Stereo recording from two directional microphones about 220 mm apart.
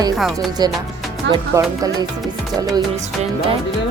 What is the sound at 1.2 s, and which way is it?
Speech, 55° right (ahead or behind).